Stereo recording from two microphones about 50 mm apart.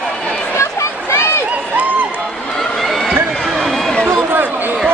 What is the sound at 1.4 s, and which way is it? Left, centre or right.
Run, right.